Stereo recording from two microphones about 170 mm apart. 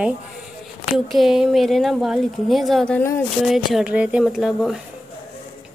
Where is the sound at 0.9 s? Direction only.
Centre (ahead or behind).